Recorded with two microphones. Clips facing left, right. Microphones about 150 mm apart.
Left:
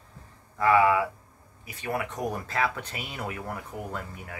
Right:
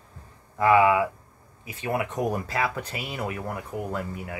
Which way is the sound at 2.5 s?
5° right (ahead or behind).